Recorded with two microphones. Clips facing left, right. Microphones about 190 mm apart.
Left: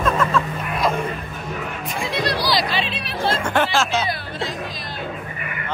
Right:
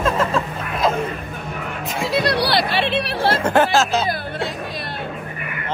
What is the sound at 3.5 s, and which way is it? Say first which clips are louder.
Speech: right 5 dB; 40° right (ahead or behind).